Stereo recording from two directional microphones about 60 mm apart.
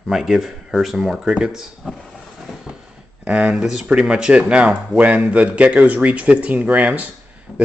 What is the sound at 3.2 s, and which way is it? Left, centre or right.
A man's voice, right.